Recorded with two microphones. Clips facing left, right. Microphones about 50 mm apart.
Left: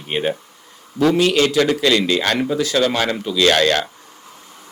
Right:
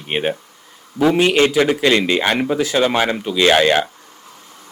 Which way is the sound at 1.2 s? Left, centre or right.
Right.